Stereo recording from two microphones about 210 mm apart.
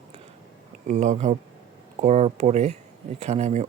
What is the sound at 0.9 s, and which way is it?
Speech, 35° right (ahead or behind).